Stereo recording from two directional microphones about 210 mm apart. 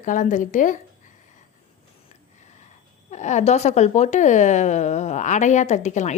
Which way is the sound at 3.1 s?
35° left (ahead or behind).